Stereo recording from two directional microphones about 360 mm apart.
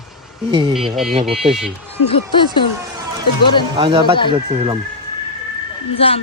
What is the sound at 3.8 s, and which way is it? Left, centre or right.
Speech, centre.